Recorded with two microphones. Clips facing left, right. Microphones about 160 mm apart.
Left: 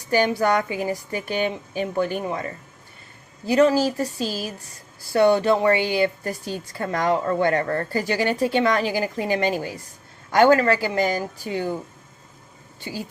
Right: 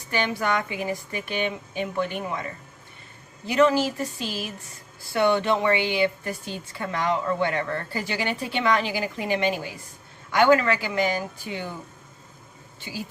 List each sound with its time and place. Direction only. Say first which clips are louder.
0.1 s a woman's voice: left 6 dB; 40° left (ahead or behind)